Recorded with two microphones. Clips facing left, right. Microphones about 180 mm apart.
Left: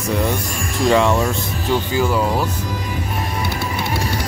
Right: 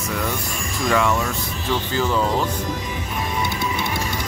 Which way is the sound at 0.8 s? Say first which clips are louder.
Left 5 dB; 30° left (ahead or behind).